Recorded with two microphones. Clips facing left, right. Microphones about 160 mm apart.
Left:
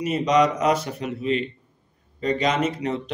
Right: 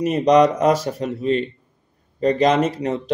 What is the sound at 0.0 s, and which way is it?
A man's voice, 40° right (ahead or behind).